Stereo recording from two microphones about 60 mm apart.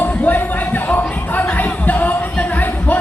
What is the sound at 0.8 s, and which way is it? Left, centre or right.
Music, left.